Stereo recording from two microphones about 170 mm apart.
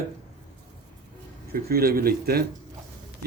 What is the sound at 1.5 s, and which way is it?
Speech, 65° right (ahead or behind).